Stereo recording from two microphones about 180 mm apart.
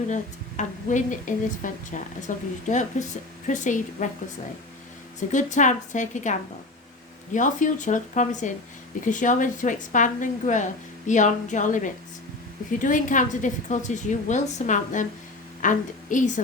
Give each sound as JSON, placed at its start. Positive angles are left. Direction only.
{"t": 0.1, "sound": "a woman's voice", "side_deg": 45}
{"t": 5.3, "sound": "a woman's voice", "side_deg": 45}
{"t": 7.3, "sound": "a woman's voice", "side_deg": 45}